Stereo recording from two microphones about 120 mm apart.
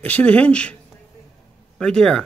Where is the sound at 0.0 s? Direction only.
15° left (ahead or behind).